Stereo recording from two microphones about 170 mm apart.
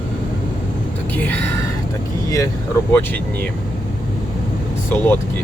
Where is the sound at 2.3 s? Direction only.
20° left (ahead or behind).